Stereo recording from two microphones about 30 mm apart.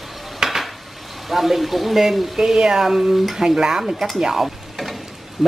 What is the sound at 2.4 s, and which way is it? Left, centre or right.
Speech, centre.